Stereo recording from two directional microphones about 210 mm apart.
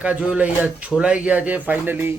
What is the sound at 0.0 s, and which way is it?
A man's voice, 5° right (ahead or behind).